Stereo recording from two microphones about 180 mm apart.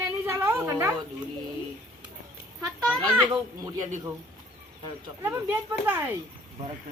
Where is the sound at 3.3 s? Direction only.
15° right (ahead or behind).